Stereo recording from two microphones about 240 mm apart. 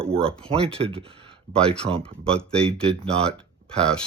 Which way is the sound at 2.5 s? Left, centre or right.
Centre.